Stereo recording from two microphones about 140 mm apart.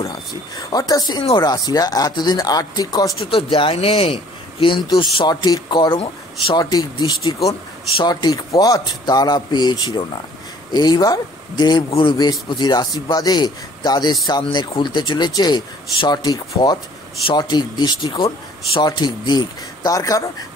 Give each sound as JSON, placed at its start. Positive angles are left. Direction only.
{"t": 0.0, "sound": "speech", "side_deg": 25}
{"t": 3.2, "sound": "a man's voice", "side_deg": 40}